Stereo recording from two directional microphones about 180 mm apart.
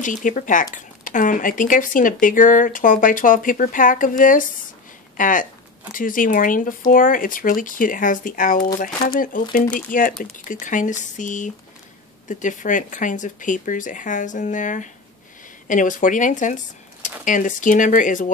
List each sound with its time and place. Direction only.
0.0 s speech: 45° left (ahead or behind)